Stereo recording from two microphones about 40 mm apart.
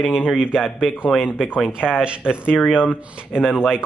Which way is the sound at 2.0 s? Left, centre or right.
Right.